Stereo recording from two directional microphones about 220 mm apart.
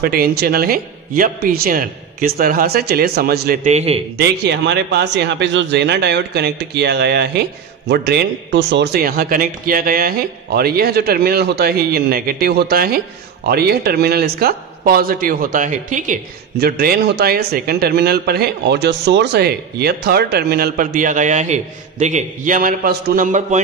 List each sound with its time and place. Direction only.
0.0 s speech: 45° right (ahead or behind)
3.6 s speech: 30° right (ahead or behind)
4.2 s speech: 50° right (ahead or behind)